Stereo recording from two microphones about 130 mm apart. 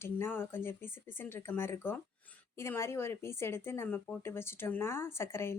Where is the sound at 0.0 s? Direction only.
15° left (ahead or behind).